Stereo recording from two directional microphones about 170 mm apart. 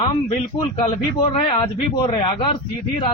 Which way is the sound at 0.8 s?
30° left (ahead or behind).